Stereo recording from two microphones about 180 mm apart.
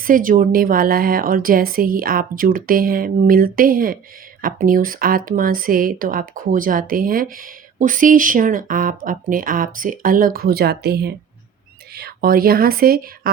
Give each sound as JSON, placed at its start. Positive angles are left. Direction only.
{"t": 0.0, "sound": "a woman's voice", "side_deg": -50}